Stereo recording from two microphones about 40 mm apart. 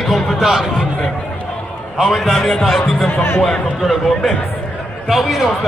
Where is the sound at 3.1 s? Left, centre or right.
Left.